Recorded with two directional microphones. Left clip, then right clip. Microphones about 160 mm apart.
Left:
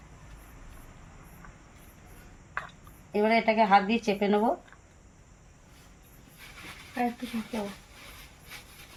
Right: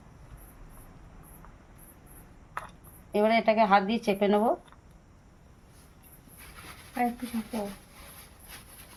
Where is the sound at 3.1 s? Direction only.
35° right (ahead or behind).